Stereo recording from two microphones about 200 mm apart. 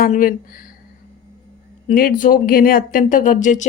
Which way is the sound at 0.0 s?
45° left (ahead or behind).